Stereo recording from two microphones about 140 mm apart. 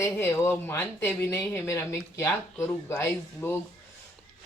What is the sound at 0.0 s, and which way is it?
Speech, 15° left (ahead or behind).